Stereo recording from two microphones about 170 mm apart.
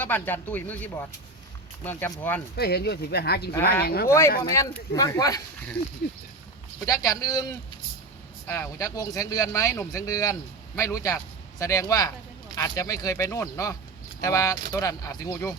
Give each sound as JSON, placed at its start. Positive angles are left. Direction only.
{"t": 0.0, "sound": "speech", "side_deg": 10}
{"t": 2.6, "sound": "speech", "side_deg": 70}
{"t": 4.5, "sound": "speech", "side_deg": 20}
{"t": 6.0, "sound": "speech", "side_deg": 60}
{"t": 6.8, "sound": "speech", "side_deg": 20}